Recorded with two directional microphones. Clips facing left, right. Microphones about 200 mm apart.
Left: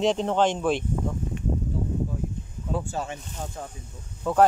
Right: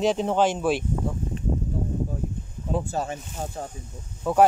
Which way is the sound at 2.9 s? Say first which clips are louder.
Right 3 dB; 40° right (ahead or behind).